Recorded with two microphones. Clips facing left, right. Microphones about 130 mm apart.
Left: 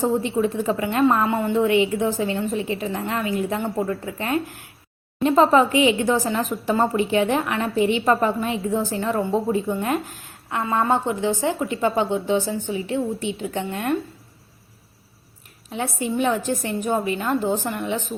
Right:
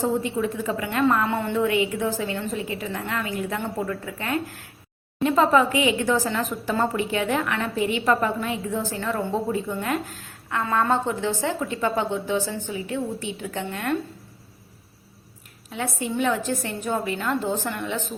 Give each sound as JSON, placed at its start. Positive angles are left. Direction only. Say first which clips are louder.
{"t": 0.2, "sound": "a woman's voice", "louder": "left 4 dB", "side_deg": 25}
{"t": 15.7, "sound": "a woman's voice", "louder": "left 3 dB", "side_deg": 20}